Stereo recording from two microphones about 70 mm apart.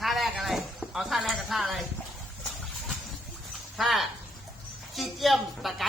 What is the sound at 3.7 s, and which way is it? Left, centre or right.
A man's voice, centre.